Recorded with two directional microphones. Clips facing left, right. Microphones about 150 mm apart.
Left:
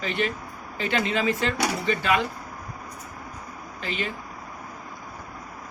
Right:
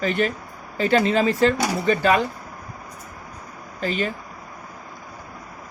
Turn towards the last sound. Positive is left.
turn(degrees=-40)  # may be behind; listen again after turning